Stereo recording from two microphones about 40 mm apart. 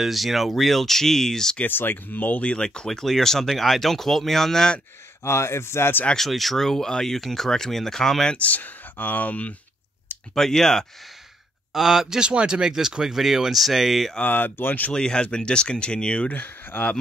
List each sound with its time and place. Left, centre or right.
0.0 s speech: centre
1.7 s speech: left
2.4 s speech: left
2.9 s speech: centre
5.2 s speech: left
6.1 s speech: centre
8.4 s speech: left
10.3 s speech: centre
11.7 s speech: centre
12.2 s speech: right; by 14.1 s centre
14.2 s speech: left
14.9 s speech: centre
16.3 s speech: left